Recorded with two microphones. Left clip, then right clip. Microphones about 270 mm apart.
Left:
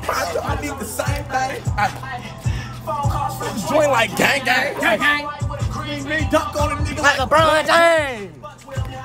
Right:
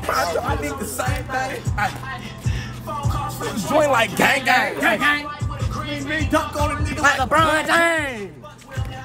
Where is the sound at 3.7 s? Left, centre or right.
Centre.